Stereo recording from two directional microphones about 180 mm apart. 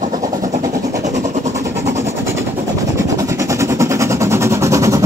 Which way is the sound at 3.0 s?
15° right (ahead or behind).